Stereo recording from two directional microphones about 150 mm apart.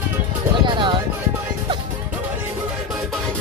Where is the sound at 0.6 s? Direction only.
30° right (ahead or behind).